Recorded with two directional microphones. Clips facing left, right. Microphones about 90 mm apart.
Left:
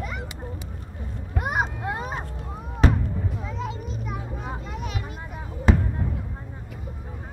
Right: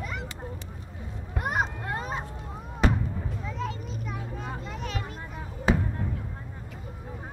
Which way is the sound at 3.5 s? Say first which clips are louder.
Right 3 dB; 15° left (ahead or behind).